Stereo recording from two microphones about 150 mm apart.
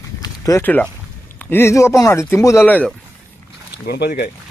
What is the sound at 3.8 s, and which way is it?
Speech, 90° left.